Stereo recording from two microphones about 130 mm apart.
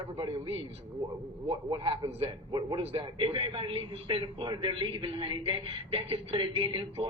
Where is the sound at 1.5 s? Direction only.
45° right (ahead or behind).